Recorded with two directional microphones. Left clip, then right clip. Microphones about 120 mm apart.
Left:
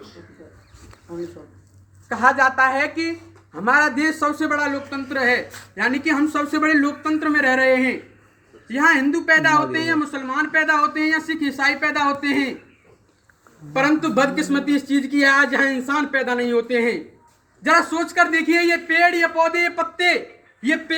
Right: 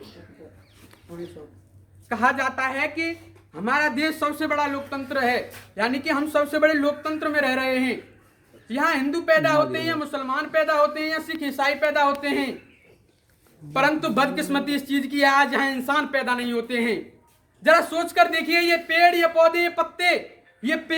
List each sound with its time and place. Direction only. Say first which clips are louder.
2.1 s a woman's voice: left 6 dB; 15° left (ahead or behind); by 12.5 s 25° right (ahead or behind)
13.7 s speech: left 2 dB; 25° right (ahead or behind)